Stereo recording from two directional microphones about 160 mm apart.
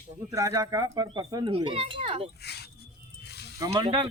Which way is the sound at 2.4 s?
90° left.